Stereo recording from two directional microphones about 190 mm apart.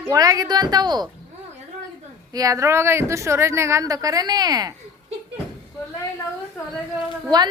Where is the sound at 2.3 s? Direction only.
15° right (ahead or behind).